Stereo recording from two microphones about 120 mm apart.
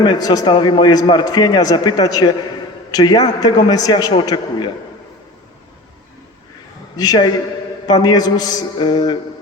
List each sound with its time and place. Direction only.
0.0 s a man's voice: 35° left (ahead or behind)
6.9 s a man's voice: 35° left (ahead or behind)